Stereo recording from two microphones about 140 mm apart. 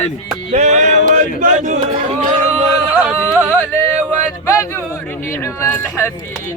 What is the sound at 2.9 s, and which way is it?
Music, 10° right (ahead or behind).